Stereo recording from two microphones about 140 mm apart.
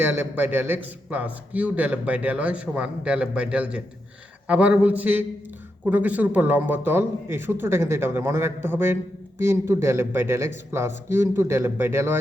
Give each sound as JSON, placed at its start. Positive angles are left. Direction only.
{"t": 0.0, "sound": "a man's voice", "side_deg": -15}